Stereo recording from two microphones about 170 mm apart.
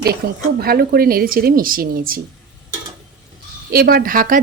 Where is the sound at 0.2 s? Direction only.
80° right.